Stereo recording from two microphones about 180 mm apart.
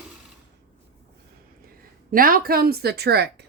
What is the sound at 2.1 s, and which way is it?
A woman's voice, 50° right (ahead or behind).